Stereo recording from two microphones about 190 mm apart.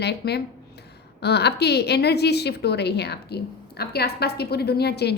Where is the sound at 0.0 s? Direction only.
60° left (ahead or behind).